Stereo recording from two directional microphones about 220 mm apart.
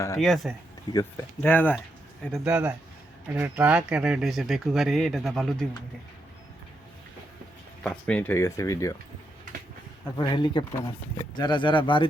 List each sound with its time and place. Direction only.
0.2 s speech: centre (ahead or behind)
0.9 s speech: 10° left (ahead or behind)
2.3 s speech: 5° right (ahead or behind)
7.9 s speech: 5° left (ahead or behind)
10.2 s speech: 20° left (ahead or behind)